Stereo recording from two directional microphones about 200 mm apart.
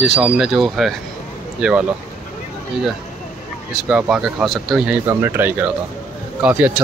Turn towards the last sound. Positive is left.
turn(degrees=-10)  # may be behind; listen again after turning